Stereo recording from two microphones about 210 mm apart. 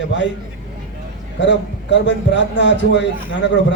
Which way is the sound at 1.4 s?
60° left (ahead or behind).